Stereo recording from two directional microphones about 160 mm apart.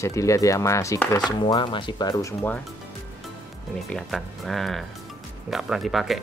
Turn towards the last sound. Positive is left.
turn(degrees=0)  # may be behind; listen again after turning